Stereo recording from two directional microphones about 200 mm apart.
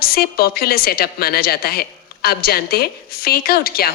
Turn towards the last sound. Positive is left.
turn(degrees=50)  # may be behind; listen again after turning